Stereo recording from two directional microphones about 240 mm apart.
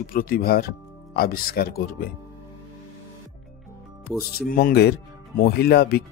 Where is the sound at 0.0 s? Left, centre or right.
Left.